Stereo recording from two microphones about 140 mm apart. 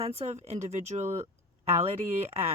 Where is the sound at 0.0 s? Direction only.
50° right (ahead or behind).